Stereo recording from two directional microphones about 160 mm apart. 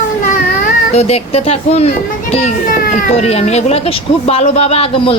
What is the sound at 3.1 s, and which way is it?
A man's voice, 40° left (ahead or behind).